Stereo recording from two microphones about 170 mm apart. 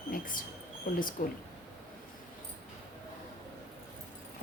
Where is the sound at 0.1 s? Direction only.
55° left (ahead or behind).